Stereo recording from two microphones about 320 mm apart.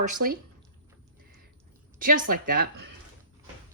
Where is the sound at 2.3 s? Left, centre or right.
Right.